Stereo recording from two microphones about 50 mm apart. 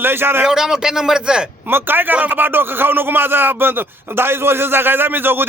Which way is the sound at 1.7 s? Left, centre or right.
Right.